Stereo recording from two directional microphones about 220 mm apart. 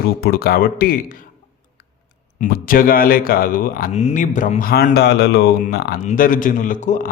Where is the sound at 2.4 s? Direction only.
40° left (ahead or behind).